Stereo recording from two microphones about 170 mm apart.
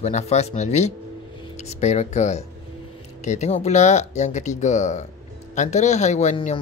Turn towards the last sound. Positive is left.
turn(degrees=40)  # may be behind; listen again after turning